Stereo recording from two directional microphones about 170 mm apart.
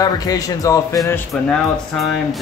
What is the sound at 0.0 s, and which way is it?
Speech, 20° left (ahead or behind).